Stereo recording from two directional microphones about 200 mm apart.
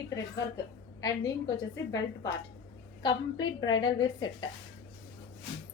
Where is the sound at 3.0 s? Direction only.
20° left (ahead or behind).